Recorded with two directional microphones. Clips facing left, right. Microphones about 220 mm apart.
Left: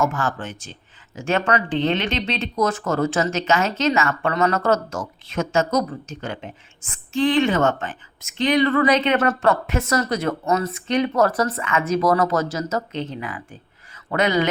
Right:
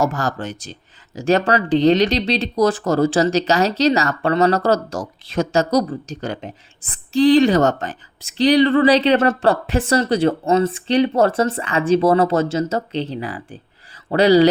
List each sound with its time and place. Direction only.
0.0 s speech: 35° right (ahead or behind)